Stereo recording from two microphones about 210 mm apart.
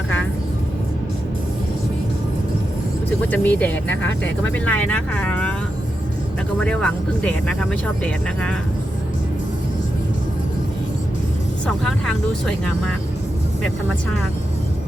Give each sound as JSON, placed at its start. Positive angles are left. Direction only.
{"t": 3.3, "sound": "speech", "side_deg": 5}
{"t": 6.6, "sound": "speech", "side_deg": 5}
{"t": 11.6, "sound": "speech", "side_deg": 5}